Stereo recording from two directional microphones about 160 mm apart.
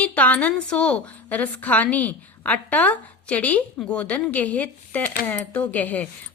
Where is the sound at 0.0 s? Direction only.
10° left (ahead or behind).